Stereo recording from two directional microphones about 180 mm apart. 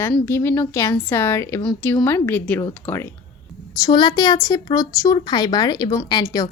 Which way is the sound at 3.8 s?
25° left (ahead or behind).